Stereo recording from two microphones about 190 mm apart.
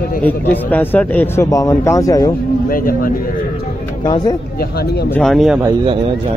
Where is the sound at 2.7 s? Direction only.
50° left (ahead or behind).